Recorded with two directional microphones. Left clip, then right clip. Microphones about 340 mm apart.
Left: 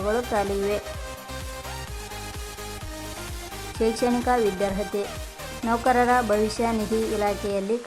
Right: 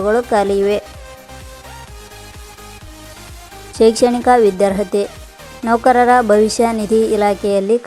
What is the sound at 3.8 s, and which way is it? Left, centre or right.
A woman's voice, centre.